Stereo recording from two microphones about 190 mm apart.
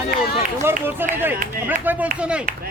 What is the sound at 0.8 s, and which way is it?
Speech, 10° right (ahead or behind).